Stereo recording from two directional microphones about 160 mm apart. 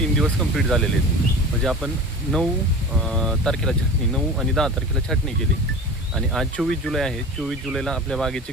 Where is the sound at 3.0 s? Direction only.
Centre (ahead or behind).